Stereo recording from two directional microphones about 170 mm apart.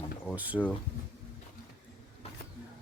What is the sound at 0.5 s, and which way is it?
Speech, 5° left (ahead or behind).